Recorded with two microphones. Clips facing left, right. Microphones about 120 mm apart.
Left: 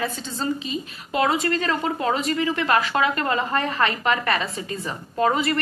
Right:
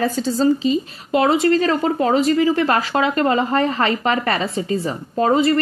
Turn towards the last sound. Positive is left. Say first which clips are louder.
# right 5 dB
turn(degrees=-30)  # may be behind; listen again after turning